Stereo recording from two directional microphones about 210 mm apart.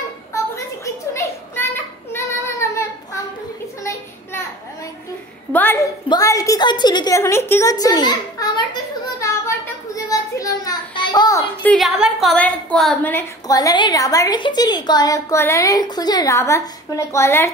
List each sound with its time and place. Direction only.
0.8 s children playing: 15° left (ahead or behind)
2.1 s child singing: 15° left (ahead or behind)
3.8 s a sound: 10° left (ahead or behind)
5.5 s a woman's voice: 10° left (ahead or behind)